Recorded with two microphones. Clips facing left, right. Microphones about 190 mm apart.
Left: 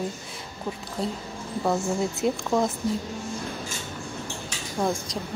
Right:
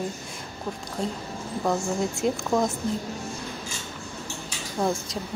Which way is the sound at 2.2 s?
Centre (ahead or behind).